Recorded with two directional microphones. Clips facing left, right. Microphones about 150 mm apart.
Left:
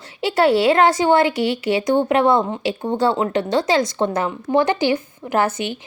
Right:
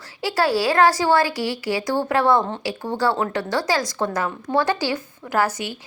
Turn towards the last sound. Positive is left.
turn(degrees=25)  # may be behind; listen again after turning